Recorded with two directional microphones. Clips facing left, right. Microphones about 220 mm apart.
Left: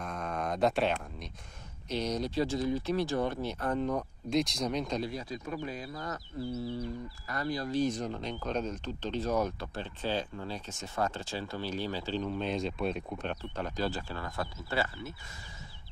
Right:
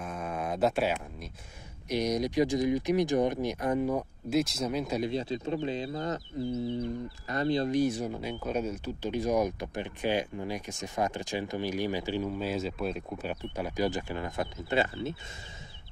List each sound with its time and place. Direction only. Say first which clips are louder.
0.0 s a sound: right 1 dB; 5° right (ahead or behind)
1.9 s speech: right 4 dB; 15° right (ahead or behind)
5.0 s speech: right 6 dB; 25° right (ahead or behind)
7.8 s speech: right 2 dB; 10° right (ahead or behind)